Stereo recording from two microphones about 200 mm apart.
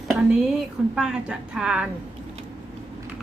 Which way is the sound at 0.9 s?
5° right (ahead or behind).